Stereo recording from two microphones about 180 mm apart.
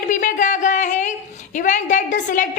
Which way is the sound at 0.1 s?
45° left (ahead or behind).